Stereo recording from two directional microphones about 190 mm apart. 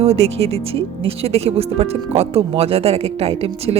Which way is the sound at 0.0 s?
35° right (ahead or behind).